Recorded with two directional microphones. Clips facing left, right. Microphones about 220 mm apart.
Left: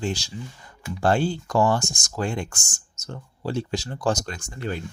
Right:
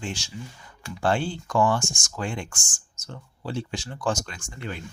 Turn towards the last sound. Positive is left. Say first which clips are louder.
# left 5 dB
turn(degrees=40)  # may be behind; listen again after turning